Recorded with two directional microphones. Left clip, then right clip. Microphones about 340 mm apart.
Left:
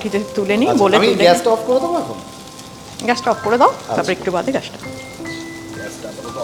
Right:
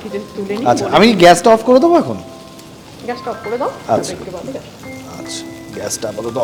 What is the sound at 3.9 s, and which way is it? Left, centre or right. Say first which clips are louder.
Speech: right 2 dB; right.